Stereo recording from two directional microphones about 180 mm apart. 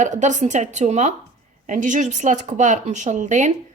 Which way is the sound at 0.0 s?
45° right (ahead or behind).